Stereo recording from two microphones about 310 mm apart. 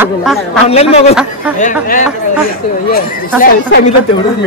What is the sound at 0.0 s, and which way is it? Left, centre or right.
Speech, centre.